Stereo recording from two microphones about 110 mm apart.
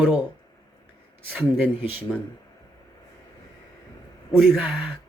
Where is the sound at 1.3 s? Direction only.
10° right (ahead or behind).